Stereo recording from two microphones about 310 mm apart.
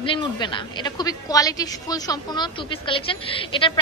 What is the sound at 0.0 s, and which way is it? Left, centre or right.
A woman's voice, centre.